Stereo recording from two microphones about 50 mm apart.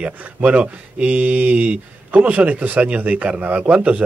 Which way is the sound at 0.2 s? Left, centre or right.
Right.